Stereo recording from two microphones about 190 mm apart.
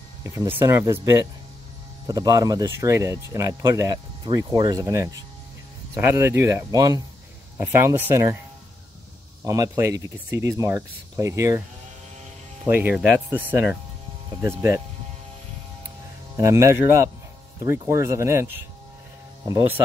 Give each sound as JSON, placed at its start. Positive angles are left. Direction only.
{"t": 0.2, "sound": "speech", "side_deg": -15}
{"t": 9.4, "sound": "speech", "side_deg": -15}
{"t": 12.6, "sound": "speech", "side_deg": -10}
{"t": 14.4, "sound": "speech", "side_deg": -15}
{"t": 16.3, "sound": "speech", "side_deg": -15}